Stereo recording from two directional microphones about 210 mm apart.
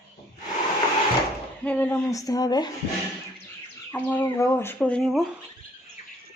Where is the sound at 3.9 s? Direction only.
10° left (ahead or behind).